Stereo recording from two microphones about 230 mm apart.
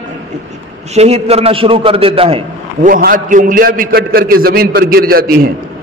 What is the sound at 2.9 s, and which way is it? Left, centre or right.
A man's voice, right.